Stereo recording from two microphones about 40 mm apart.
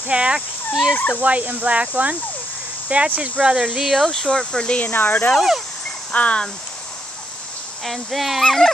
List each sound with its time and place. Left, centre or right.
0.1 s speech: right
0.9 s speech: left
1.2 s speech: right
3.4 s speech: right
3.9 s speech: centre
4.3 s speech: left
4.9 s speech: left
6.1 s speech: left
7.8 s speech: centre
8.5 s speech: centre